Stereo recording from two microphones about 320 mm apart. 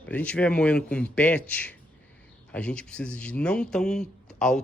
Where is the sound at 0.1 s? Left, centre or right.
Centre.